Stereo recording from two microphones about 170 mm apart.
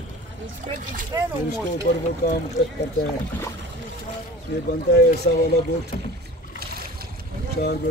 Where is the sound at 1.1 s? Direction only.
20° right (ahead or behind).